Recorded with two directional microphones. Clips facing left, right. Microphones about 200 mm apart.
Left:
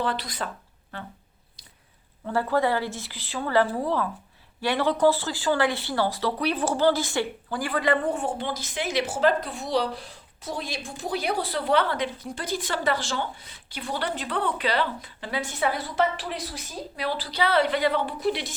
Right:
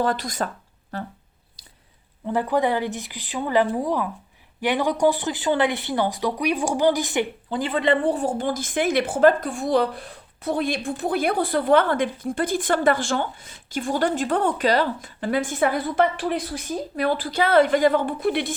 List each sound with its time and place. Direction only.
0.0 s speech: 45° right (ahead or behind)
2.2 s a woman's voice: 15° right (ahead or behind); by 18.5 s 55° right (ahead or behind)